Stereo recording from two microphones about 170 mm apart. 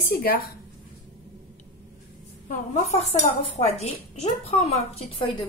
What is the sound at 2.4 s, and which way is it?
A woman's voice, 40° left (ahead or behind).